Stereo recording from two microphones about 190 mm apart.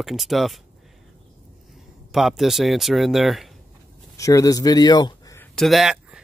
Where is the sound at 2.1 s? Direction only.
Centre (ahead or behind).